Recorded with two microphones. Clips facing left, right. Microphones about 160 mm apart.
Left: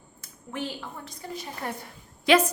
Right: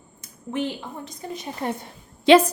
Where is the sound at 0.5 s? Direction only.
20° right (ahead or behind).